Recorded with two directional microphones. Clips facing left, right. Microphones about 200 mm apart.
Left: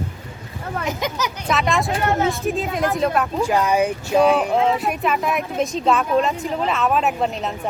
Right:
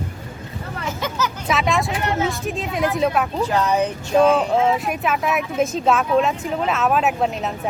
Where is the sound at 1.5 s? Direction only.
Centre (ahead or behind).